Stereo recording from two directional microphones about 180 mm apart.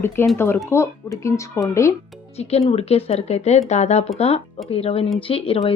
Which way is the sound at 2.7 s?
35° left (ahead or behind).